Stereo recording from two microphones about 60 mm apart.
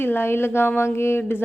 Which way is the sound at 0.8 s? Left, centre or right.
Left.